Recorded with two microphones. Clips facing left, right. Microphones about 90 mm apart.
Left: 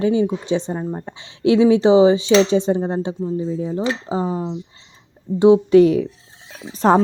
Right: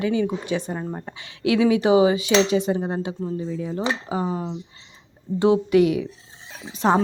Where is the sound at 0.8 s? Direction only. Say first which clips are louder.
Left 4 dB; 5° left (ahead or behind).